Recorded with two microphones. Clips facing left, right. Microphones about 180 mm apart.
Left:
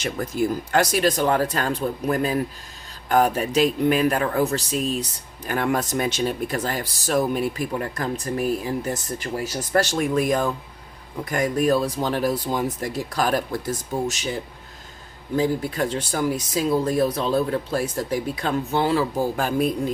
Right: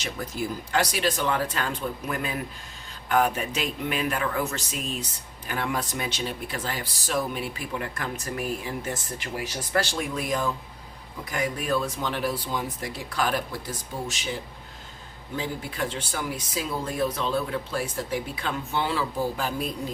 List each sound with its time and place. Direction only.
0.0 s speech: 50° left (ahead or behind)
5.5 s speech: 45° left (ahead or behind)
15.4 s speech: 40° left (ahead or behind)